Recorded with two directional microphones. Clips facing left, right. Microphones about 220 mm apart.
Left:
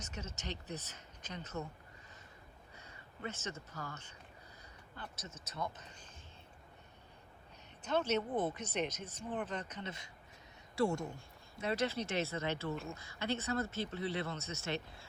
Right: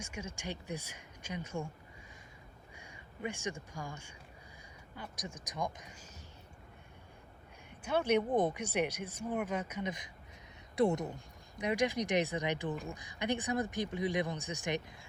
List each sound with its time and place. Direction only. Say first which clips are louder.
0.0 s speech: right 3 dB; 10° right (ahead or behind)
2.7 s speech: right 3 dB; 10° right (ahead or behind)
7.9 s speech: right 4 dB; 10° right (ahead or behind)